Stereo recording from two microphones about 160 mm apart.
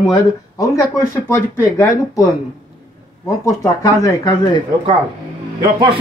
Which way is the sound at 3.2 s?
20° left (ahead or behind).